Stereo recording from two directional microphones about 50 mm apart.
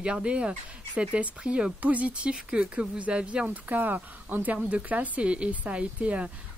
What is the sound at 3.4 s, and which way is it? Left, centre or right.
Speech, right.